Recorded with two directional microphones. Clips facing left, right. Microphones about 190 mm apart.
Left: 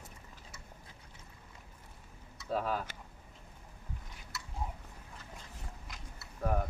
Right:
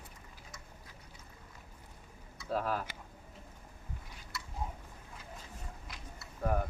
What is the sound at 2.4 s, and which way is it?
Speech, centre (ahead or behind).